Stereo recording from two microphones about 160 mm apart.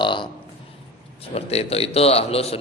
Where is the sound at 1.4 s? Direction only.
40° left (ahead or behind).